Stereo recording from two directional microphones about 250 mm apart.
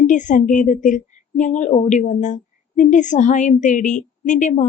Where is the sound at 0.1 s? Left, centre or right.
Left.